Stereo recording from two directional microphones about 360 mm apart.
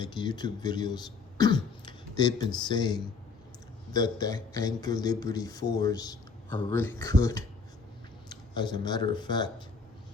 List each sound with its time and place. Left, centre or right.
0.0 s a man's voice: centre